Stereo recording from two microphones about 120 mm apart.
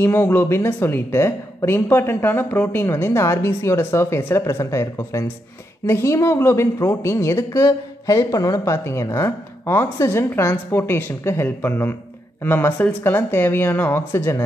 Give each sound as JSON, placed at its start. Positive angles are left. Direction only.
{"t": 0.0, "sound": "a woman's voice", "side_deg": 20}